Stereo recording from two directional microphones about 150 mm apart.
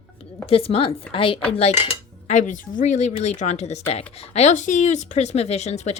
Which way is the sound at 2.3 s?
55° left (ahead or behind).